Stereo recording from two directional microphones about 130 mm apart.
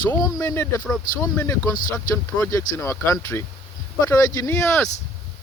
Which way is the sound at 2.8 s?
20° left (ahead or behind).